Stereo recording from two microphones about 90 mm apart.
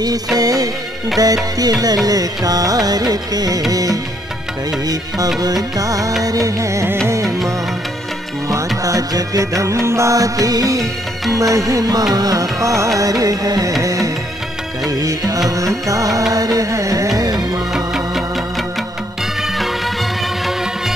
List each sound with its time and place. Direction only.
0.4 s music: 45° right (ahead or behind)
5.4 s music: 40° right (ahead or behind)
8.5 s music: 40° right (ahead or behind)
17.7 s music: 5° right (ahead or behind)